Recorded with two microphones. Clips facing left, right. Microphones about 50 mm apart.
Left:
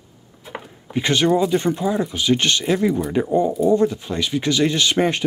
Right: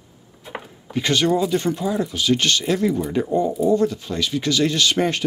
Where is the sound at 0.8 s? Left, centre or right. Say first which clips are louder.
Left 1 dB; centre.